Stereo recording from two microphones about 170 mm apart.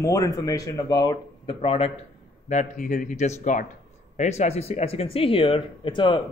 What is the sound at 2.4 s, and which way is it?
Speech, 50° left (ahead or behind).